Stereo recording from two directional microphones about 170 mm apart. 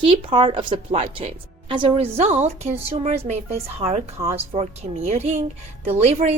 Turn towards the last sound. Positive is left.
turn(degrees=-40)  # may be behind; listen again after turning